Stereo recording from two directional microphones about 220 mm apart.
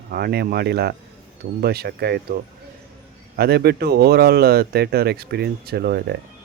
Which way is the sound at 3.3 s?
45° right (ahead or behind).